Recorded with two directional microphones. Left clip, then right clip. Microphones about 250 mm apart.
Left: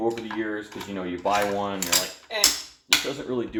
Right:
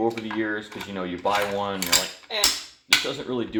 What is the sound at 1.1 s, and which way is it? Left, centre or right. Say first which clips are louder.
Speech: even; right.